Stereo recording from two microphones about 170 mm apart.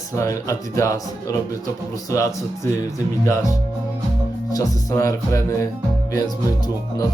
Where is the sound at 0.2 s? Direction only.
15° left (ahead or behind).